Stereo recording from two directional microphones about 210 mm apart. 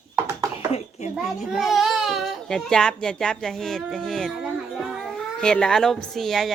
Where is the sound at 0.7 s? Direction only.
30° left (ahead or behind).